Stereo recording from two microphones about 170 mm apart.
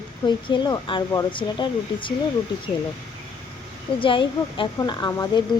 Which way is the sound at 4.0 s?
30° left (ahead or behind).